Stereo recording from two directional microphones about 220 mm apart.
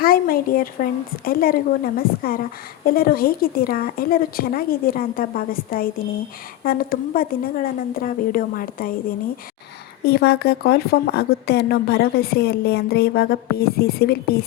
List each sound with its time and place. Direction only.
0.0 s a woman's voice: 40° left (ahead or behind)
10.0 s a woman's voice: 45° left (ahead or behind)